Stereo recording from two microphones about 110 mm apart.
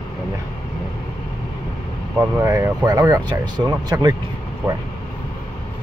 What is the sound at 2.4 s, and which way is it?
Speech, 25° right (ahead or behind).